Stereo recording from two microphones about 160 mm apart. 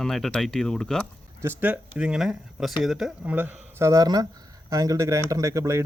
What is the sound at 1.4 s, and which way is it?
Speech, 15° right (ahead or behind).